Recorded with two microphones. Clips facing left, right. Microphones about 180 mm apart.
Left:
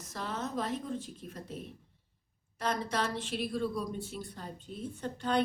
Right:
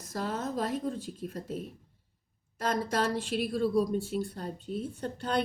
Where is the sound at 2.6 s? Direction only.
40° right (ahead or behind).